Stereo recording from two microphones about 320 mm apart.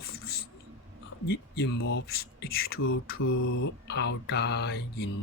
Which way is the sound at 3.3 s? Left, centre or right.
Left.